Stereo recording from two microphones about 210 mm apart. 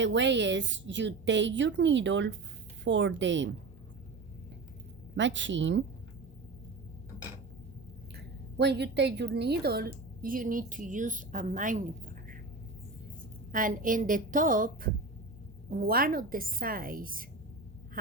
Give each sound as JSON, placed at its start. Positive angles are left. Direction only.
{"t": 0.0, "sound": "a woman's voice", "side_deg": -60}
{"t": 5.1, "sound": "a woman's voice", "side_deg": -60}
{"t": 8.1, "sound": "a woman's voice", "side_deg": -50}
{"t": 13.5, "sound": "a woman's voice", "side_deg": -40}